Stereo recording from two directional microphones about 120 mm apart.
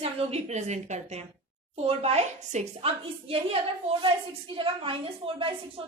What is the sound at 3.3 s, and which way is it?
A woman's voice, 55° right (ahead or behind).